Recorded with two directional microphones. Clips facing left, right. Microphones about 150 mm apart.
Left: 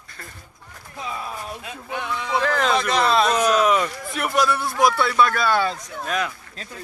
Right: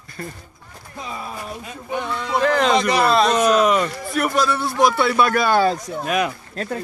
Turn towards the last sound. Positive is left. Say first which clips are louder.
# right 12 dB
turn(degrees=-65)  # may be behind; listen again after turning